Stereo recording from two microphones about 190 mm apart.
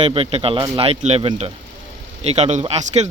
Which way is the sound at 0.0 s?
30° right (ahead or behind).